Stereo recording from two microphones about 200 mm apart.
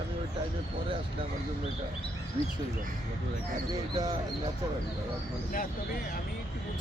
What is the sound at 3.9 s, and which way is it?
Speech, 20° right (ahead or behind).